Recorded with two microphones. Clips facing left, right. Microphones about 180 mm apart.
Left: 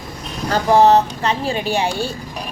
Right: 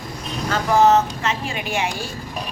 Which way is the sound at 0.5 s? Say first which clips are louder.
Left 3 dB; 35° left (ahead or behind).